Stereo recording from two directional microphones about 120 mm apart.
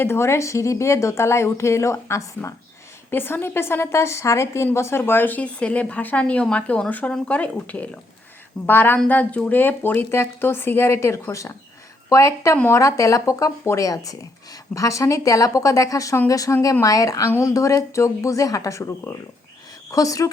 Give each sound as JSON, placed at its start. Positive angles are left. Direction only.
{"t": 0.0, "sound": "a woman's voice", "side_deg": 20}